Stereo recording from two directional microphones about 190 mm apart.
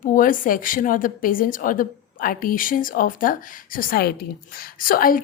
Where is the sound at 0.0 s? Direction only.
45° left (ahead or behind).